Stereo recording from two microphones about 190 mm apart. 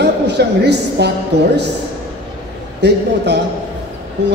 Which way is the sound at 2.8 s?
60° right (ahead or behind).